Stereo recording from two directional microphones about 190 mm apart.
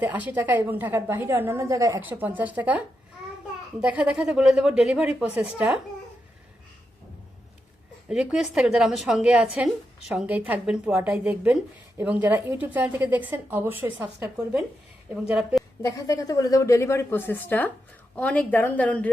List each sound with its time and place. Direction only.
0.0 s a woman's voice: 10° right (ahead or behind)
8.1 s a woman's voice: 5° right (ahead or behind)
15.8 s a woman's voice: 20° left (ahead or behind)